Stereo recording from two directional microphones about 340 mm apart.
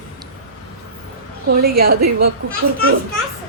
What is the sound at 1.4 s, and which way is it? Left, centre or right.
Speech, right.